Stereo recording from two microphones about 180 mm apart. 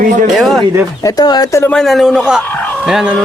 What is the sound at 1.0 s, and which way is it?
Speech, 20° left (ahead or behind).